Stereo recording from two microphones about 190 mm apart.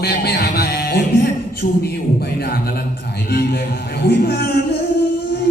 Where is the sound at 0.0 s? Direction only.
55° left (ahead or behind).